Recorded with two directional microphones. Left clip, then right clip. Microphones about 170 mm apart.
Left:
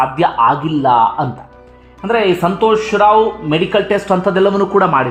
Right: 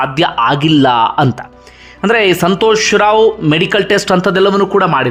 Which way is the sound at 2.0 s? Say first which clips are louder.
Right 3 dB; 30° right (ahead or behind).